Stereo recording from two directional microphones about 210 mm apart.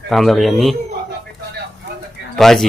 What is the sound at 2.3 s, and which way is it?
Speech, centre (ahead or behind).